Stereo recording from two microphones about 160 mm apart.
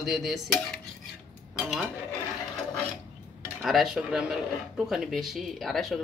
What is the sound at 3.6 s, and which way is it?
Speech, centre (ahead or behind).